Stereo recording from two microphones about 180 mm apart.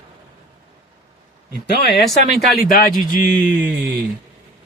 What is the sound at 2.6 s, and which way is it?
Speech, 50° left (ahead or behind).